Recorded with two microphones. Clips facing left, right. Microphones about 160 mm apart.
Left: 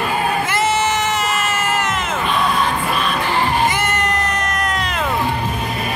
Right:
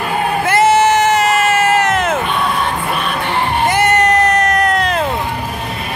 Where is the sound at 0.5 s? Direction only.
60° right (ahead or behind).